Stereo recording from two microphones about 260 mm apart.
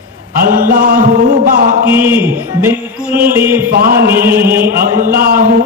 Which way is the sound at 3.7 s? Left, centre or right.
Right.